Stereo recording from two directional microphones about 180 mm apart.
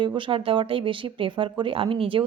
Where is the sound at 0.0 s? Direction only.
25° right (ahead or behind).